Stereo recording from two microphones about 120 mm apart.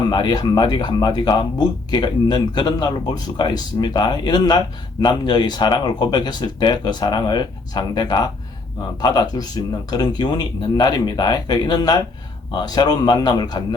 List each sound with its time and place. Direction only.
0.1 s speech: 35° left (ahead or behind)